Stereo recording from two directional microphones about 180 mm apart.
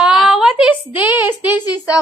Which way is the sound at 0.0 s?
5° right (ahead or behind).